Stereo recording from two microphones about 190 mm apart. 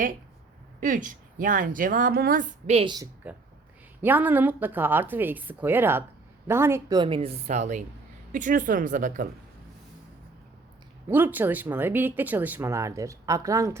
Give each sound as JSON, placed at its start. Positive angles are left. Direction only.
{"t": 0.8, "sound": "speech", "side_deg": -45}
{"t": 4.0, "sound": "a woman's voice", "side_deg": -10}
{"t": 11.1, "sound": "speech", "side_deg": -10}